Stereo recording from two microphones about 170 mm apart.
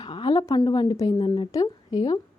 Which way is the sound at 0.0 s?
30° left (ahead or behind).